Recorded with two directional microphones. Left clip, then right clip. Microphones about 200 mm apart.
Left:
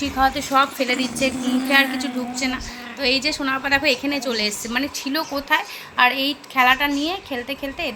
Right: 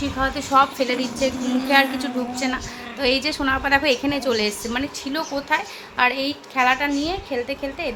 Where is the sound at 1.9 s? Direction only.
20° right (ahead or behind).